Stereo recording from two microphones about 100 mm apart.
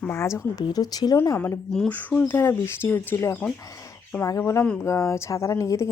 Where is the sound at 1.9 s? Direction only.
15° left (ahead or behind).